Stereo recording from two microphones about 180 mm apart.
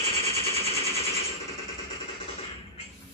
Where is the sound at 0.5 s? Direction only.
35° left (ahead or behind).